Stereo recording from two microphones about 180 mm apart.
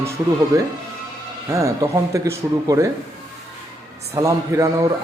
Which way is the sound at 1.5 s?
15° right (ahead or behind).